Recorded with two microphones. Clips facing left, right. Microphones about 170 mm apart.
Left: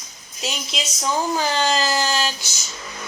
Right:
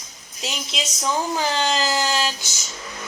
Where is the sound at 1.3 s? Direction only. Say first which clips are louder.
Left 1 dB; 20° right (ahead or behind).